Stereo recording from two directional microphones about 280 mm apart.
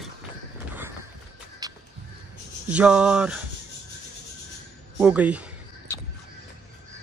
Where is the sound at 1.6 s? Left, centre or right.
Centre.